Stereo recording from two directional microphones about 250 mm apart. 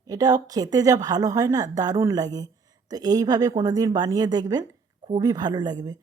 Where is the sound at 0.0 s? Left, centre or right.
Centre.